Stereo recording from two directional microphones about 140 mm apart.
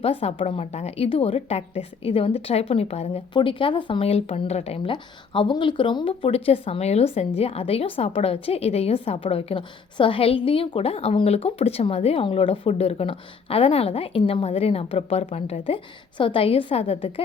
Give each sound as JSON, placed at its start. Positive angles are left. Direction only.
{"t": 0.0, "sound": "speech", "side_deg": 45}
{"t": 3.3, "sound": "speech", "side_deg": 35}